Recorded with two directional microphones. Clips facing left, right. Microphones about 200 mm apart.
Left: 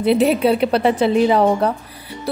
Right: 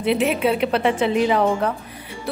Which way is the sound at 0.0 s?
35° left (ahead or behind).